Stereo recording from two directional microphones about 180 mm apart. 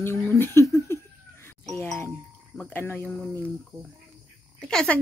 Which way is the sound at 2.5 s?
10° left (ahead or behind).